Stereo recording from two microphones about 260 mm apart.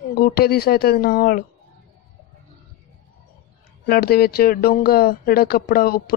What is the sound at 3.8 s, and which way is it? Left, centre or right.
Speech, left.